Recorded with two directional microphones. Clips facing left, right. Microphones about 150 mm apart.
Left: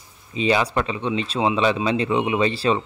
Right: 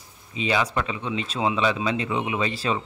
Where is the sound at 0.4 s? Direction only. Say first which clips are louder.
Left 4 dB; 35° left (ahead or behind).